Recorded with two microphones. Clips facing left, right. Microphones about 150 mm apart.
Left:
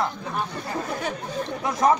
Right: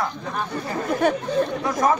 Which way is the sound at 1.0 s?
60° right (ahead or behind).